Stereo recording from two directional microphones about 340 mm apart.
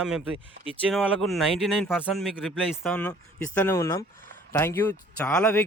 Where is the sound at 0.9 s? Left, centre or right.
Centre.